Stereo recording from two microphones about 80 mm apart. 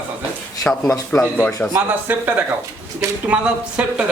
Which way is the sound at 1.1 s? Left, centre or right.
Centre.